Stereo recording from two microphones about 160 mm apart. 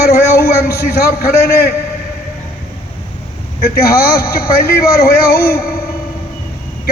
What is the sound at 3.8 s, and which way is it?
A man's voice, 70° left (ahead or behind).